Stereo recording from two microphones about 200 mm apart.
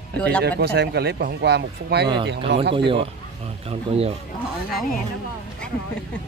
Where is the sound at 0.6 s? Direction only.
55° right (ahead or behind).